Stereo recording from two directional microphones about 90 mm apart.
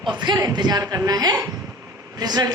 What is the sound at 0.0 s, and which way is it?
A woman's voice, 55° right (ahead or behind).